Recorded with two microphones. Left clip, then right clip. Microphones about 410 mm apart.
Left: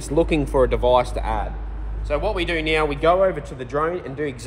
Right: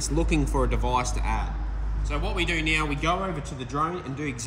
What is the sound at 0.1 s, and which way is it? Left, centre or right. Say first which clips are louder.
Speech: left 9 dB; left.